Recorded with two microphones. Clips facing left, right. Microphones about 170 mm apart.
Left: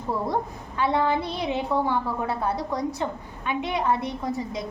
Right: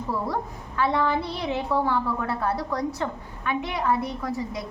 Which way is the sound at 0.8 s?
20° left (ahead or behind).